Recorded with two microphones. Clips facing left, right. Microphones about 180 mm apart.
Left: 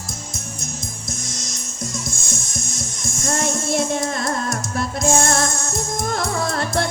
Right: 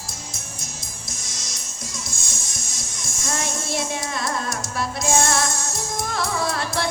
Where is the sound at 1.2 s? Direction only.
50° left (ahead or behind).